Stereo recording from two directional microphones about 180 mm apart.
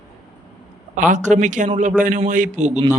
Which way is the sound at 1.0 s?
45° right (ahead or behind).